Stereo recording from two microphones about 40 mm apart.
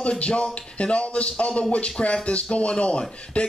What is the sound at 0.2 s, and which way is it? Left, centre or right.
Speech, left.